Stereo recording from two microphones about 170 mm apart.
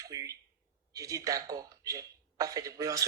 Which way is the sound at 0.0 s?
20° right (ahead or behind).